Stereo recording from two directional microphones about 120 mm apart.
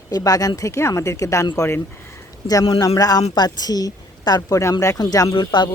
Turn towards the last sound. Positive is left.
turn(degrees=45)  # may be behind; listen again after turning